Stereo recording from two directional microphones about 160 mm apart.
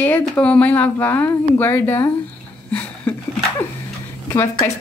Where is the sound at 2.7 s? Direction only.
10° left (ahead or behind).